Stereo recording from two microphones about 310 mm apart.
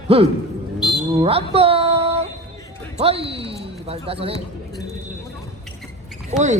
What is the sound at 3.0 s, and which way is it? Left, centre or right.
Speech, centre.